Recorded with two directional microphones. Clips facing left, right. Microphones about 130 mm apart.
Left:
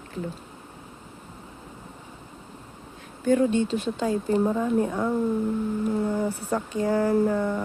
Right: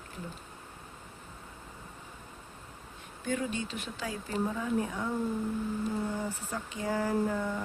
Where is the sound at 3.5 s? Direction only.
30° left (ahead or behind).